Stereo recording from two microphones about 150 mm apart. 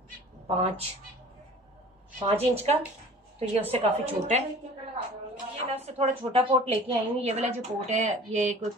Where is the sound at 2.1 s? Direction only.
40° right (ahead or behind).